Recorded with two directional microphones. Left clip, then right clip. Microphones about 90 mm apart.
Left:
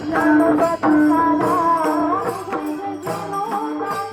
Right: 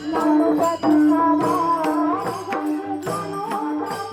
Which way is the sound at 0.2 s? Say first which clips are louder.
Left 3 dB; 30° left (ahead or behind).